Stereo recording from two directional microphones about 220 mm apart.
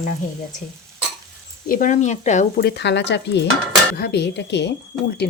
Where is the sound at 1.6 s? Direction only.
40° left (ahead or behind).